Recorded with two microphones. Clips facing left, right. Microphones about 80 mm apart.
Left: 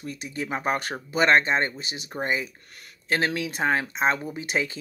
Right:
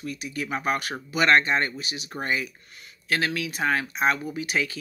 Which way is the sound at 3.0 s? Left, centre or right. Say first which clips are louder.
Left 1 dB; left.